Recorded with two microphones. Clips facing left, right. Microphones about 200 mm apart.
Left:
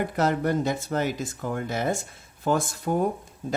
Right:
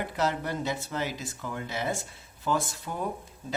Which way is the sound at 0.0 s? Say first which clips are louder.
Left 5 dB; 50° left (ahead or behind).